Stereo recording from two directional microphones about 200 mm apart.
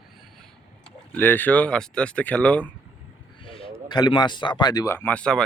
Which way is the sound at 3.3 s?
25° left (ahead or behind).